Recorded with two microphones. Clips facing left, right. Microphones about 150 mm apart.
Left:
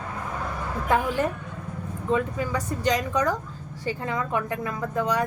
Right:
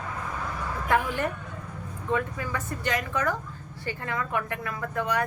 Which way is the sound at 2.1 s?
20° left (ahead or behind).